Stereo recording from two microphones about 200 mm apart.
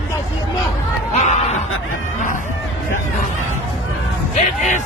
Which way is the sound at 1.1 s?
35° left (ahead or behind).